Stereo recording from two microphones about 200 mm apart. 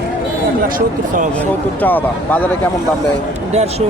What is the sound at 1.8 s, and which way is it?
Speech, 10° left (ahead or behind).